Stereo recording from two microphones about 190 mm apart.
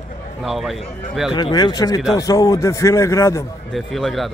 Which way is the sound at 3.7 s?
Centre (ahead or behind).